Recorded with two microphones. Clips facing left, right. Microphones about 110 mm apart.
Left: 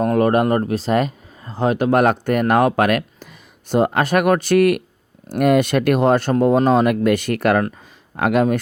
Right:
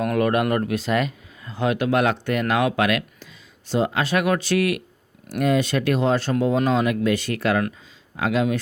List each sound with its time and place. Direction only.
0.0 s speech: 35° left (ahead or behind); by 8.5 s 55° left (ahead or behind)